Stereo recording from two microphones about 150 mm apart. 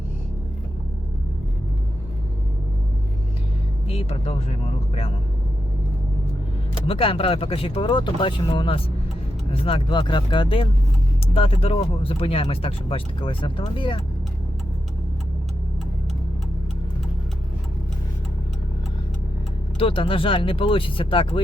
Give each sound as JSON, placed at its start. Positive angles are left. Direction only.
{"t": 3.8, "sound": "speech", "side_deg": 40}
{"t": 6.8, "sound": "speech", "side_deg": 40}
{"t": 19.8, "sound": "speech", "side_deg": 35}